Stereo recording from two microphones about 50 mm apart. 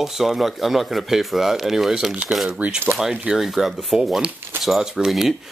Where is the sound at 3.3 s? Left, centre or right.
Centre.